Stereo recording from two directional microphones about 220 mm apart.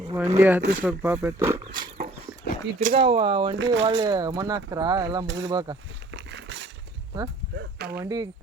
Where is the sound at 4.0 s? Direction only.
20° right (ahead or behind).